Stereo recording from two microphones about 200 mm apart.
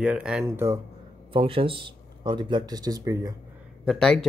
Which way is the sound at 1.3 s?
25° right (ahead or behind).